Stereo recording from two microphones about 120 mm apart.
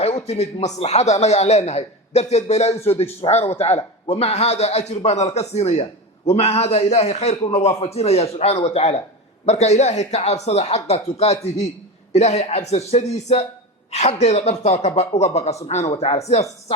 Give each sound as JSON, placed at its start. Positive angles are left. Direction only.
{"t": 0.0, "sound": "a man's voice", "side_deg": 60}